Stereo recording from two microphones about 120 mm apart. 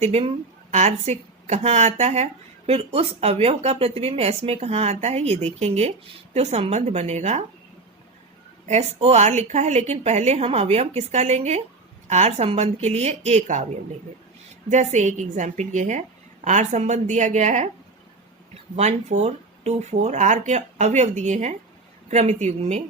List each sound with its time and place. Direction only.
0.0 s speech: 55° right (ahead or behind)
0.7 s speech: 65° right (ahead or behind)
8.6 s a woman's voice: 65° right (ahead or behind)
14.7 s a woman's voice: 80° right
18.8 s a woman's voice: 70° right (ahead or behind); by 21.5 s 85° right
22.1 s a woman's voice: 70° right (ahead or behind)